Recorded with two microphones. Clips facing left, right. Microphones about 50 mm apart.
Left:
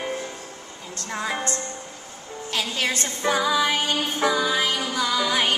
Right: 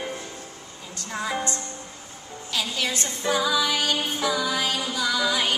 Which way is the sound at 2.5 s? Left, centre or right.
Left.